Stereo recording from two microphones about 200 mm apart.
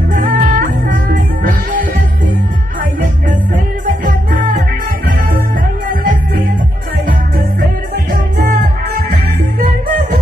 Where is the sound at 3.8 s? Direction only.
40° right (ahead or behind).